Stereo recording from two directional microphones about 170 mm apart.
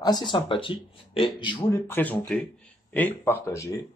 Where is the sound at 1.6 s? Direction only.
15° left (ahead or behind).